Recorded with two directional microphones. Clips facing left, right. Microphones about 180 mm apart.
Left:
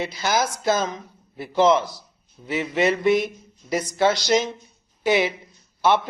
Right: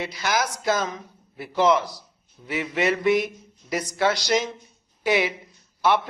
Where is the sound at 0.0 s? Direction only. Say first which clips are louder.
Left 2 dB; 25° left (ahead or behind).